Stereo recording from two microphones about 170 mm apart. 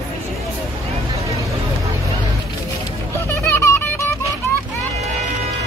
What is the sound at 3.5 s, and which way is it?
Music, 15° left (ahead or behind).